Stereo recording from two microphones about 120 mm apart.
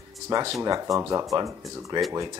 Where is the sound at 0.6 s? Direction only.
30° right (ahead or behind).